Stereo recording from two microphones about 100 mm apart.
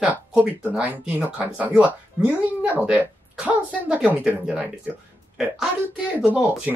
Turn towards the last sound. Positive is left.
turn(degrees=-15)  # may be behind; listen again after turning